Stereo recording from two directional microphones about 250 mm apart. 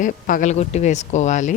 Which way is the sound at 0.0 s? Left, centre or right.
Left.